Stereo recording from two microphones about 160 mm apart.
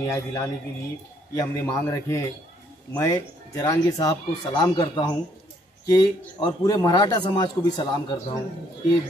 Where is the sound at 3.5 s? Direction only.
20° left (ahead or behind).